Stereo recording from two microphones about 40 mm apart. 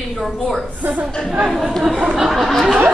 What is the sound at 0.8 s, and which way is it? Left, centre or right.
Speech, right.